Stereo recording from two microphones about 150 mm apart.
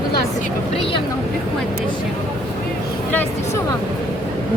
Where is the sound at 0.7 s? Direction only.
40° left (ahead or behind).